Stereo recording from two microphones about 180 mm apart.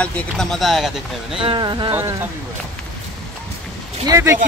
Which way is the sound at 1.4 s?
25° right (ahead or behind).